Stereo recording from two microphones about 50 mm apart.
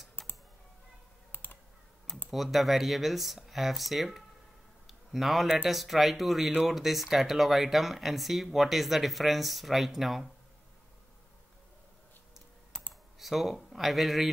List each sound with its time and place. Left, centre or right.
1.3 s typing: left
2.3 s speech: centre
4.8 s a sound: centre
5.7 s speech: centre
13.2 s speech: centre